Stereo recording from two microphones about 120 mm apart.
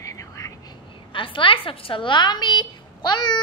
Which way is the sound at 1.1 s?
45° left (ahead or behind).